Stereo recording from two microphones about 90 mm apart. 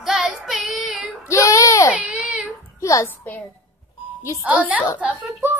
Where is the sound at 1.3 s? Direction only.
35° left (ahead or behind).